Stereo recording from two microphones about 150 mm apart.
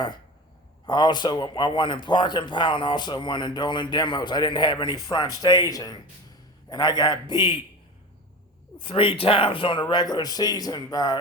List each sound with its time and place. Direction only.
0.9 s a man's voice: 30° left (ahead or behind)
8.8 s a man's voice: 35° left (ahead or behind)